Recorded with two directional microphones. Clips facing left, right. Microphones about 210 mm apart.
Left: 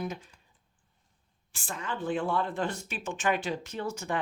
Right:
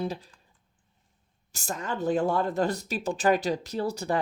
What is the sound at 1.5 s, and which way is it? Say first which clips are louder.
Speech: right 4 dB; 40° right (ahead or behind).